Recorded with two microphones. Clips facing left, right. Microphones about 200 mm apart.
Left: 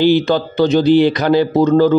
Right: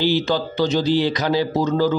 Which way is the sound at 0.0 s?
55° left (ahead or behind).